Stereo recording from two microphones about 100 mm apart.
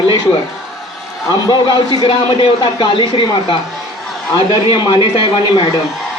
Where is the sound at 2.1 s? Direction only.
60° left (ahead or behind).